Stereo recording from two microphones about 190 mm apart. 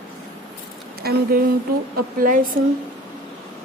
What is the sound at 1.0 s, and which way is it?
Speech, 55° right (ahead or behind).